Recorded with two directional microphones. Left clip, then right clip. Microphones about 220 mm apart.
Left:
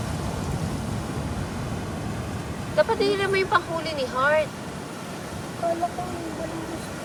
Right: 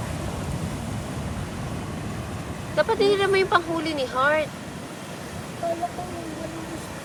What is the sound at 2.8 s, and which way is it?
Speech, 5° left (ahead or behind).